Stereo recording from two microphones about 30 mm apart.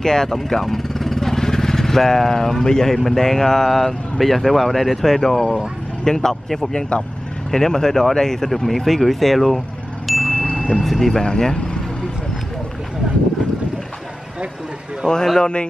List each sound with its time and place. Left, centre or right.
0.0 s speech: centre
7.5 s speech: centre
10.0 s wind chime: centre
10.3 s wind chime: left
10.8 s speech: centre
11.2 s speech: left
15.1 s speech: left